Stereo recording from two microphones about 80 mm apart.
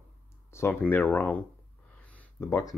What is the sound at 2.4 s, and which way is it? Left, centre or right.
Speech, left.